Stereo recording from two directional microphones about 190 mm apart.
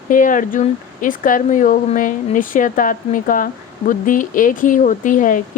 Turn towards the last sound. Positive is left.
turn(degrees=45)  # may be behind; listen again after turning